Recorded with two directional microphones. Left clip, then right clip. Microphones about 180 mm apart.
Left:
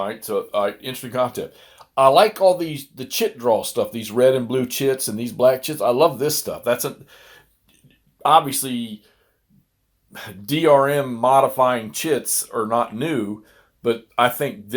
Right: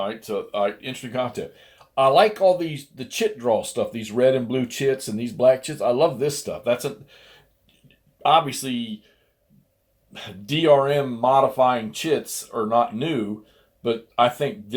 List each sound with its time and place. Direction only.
0.0 s speech: 35° left (ahead or behind)
10.1 s speech: 25° left (ahead or behind)